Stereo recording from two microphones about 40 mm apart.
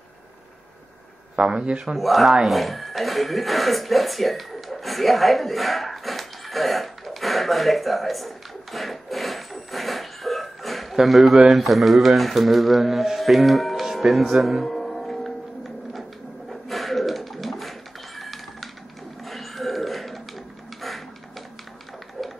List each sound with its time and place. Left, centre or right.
1.5 s a man's voice: right
2.0 s speech: centre
8.7 s a sound: centre
13.9 s speech: centre
14.4 s music: centre
15.9 s a sound: centre